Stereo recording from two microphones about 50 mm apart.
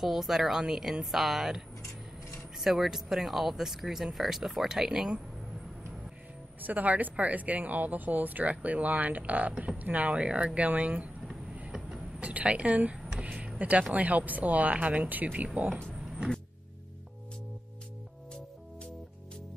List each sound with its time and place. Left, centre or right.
0.0 s speech: centre
2.6 s speech: centre
6.6 s a woman's voice: right
11.5 s vehicle: centre
12.2 s speech: right
12.9 s a sound: centre
13.6 s speech: right
15.9 s vehicle: centre